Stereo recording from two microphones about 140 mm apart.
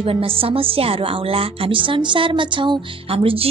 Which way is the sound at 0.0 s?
40° right (ahead or behind).